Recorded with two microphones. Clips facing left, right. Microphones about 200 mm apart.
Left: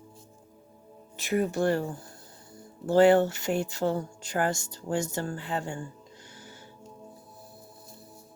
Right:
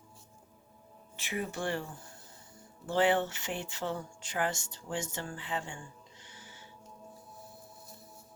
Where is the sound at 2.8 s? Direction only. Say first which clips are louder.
Left 9 dB; 40° left (ahead or behind).